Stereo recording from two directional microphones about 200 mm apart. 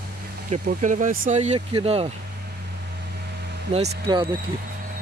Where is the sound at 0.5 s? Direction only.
40° right (ahead or behind).